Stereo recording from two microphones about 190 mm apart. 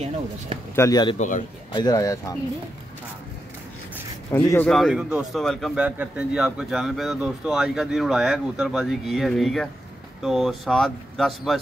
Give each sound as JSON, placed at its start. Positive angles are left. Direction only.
{"t": 0.7, "sound": "speech", "side_deg": 20}
{"t": 1.1, "sound": "a man's voice", "side_deg": 40}
{"t": 1.7, "sound": "speech", "side_deg": 20}
{"t": 4.4, "sound": "speech", "side_deg": 15}
{"t": 4.6, "sound": "speech", "side_deg": 0}